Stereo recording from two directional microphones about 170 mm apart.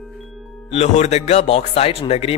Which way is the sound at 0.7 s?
40° left (ahead or behind).